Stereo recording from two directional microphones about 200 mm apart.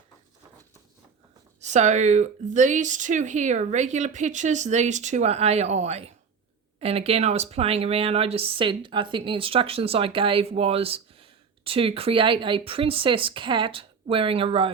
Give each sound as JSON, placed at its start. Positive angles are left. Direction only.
{"t": 1.6, "sound": "speech", "side_deg": -35}